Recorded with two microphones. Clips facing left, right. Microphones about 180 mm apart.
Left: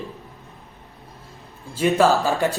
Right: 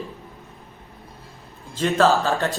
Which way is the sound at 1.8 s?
10° left (ahead or behind).